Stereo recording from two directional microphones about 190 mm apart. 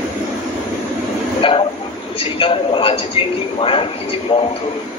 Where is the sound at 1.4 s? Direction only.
25° left (ahead or behind).